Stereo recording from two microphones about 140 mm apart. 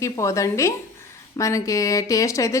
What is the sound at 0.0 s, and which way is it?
A woman's voice, 20° left (ahead or behind).